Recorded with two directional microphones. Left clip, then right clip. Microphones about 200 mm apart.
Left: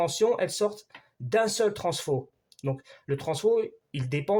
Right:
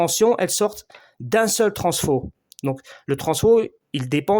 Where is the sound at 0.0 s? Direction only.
40° right (ahead or behind).